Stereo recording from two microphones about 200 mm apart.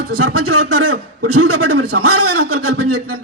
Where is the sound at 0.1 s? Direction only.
90° right.